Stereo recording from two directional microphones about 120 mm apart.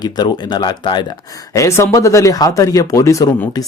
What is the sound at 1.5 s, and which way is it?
Speech, 25° left (ahead or behind).